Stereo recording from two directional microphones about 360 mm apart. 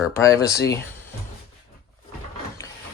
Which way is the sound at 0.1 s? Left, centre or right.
Centre.